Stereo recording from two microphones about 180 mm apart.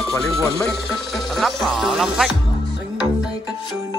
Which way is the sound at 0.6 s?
Centre (ahead or behind).